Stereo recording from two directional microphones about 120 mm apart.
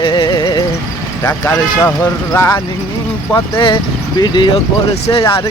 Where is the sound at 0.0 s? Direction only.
40° left (ahead or behind).